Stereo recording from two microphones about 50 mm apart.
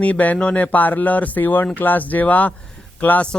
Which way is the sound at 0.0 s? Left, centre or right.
Left.